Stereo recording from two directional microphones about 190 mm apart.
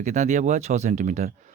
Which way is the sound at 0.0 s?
40° right (ahead or behind).